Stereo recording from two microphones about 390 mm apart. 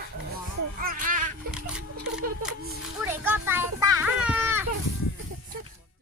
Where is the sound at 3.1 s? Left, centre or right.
Centre.